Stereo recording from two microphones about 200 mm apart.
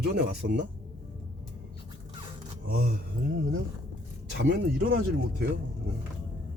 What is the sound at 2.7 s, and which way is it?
Speech, 45° right (ahead or behind).